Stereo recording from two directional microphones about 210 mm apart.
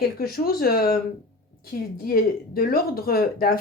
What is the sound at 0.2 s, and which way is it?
Speech, 45° left (ahead or behind).